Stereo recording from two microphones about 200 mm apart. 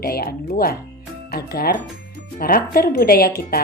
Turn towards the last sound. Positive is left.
turn(degrees=50)  # may be behind; listen again after turning